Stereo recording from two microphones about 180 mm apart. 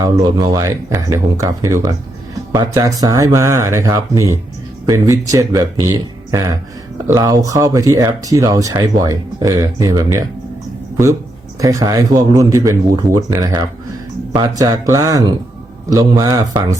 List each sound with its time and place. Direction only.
0.0 s speech: 20° right (ahead or behind)
11.6 s speech: 20° right (ahead or behind)